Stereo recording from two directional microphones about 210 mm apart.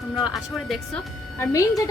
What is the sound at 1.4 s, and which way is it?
Speech, 15° left (ahead or behind).